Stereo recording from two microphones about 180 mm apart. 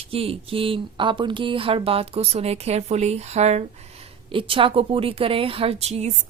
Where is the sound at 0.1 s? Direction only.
30° right (ahead or behind).